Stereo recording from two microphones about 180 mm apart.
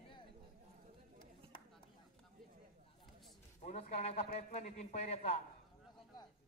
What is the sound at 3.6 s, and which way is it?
A man's voice, 40° left (ahead or behind).